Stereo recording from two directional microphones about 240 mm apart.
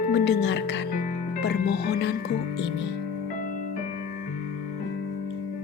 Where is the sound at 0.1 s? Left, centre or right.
Left.